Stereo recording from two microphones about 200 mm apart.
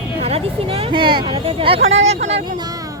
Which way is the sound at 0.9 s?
25° right (ahead or behind).